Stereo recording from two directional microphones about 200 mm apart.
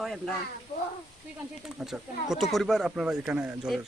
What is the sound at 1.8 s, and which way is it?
Speech, 5° right (ahead or behind).